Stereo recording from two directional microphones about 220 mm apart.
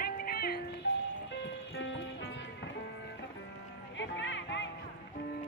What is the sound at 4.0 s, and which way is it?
Music, 55° left (ahead or behind).